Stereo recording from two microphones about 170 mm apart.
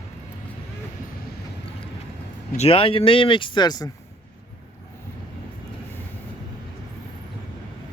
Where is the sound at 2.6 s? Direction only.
35° left (ahead or behind).